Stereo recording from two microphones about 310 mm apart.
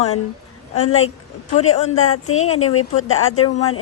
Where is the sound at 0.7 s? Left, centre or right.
Left.